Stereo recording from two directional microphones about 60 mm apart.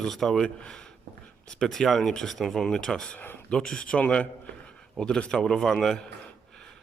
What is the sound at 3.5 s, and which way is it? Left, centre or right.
A man's voice, centre.